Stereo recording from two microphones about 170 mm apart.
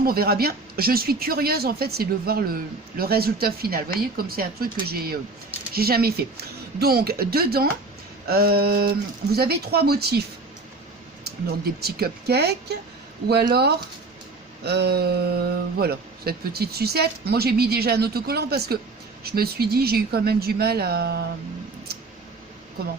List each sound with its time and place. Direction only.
0.0 s speech: 60° right (ahead or behind)